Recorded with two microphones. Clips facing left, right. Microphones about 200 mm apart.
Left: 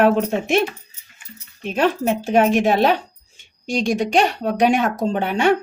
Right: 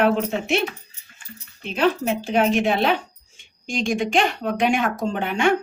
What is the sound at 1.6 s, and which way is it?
Speech, 45° left (ahead or behind).